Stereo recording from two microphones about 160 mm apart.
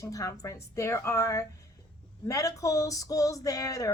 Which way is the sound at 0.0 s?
20° left (ahead or behind).